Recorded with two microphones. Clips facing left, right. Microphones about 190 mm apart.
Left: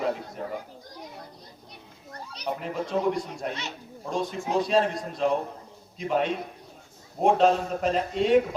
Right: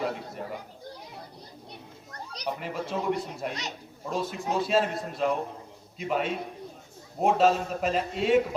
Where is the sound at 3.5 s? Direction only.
40° right (ahead or behind).